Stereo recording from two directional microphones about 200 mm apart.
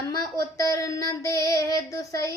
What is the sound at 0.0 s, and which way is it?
A woman's voice, 15° left (ahead or behind).